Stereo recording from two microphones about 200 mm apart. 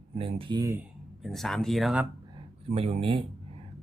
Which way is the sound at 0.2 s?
30° right (ahead or behind).